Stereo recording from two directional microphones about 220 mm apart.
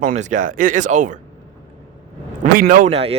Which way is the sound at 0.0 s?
35° right (ahead or behind).